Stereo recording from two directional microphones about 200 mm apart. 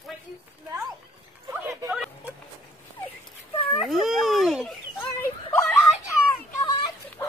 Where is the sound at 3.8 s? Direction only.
Centre (ahead or behind).